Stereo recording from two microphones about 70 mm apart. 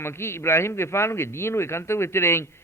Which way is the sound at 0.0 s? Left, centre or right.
Left.